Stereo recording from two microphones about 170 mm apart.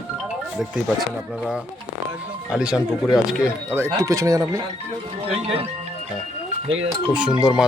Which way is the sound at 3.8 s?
20° right (ahead or behind).